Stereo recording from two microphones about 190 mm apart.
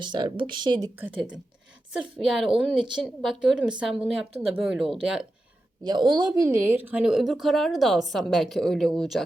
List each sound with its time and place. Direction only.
0.0 s speech: 25° right (ahead or behind)
0.9 s speech: 10° right (ahead or behind)
5.8 s speech: 20° right (ahead or behind); by 9.2 s centre (ahead or behind)